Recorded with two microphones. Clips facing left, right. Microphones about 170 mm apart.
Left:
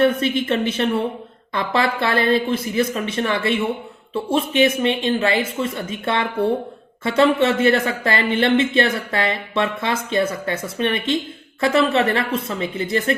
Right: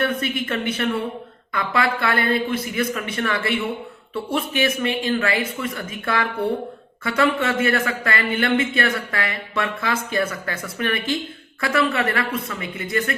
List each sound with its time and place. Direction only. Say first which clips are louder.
0.0 s speech: left 6 dB; 25° left (ahead or behind)